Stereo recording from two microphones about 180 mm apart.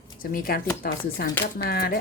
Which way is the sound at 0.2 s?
55° left (ahead or behind).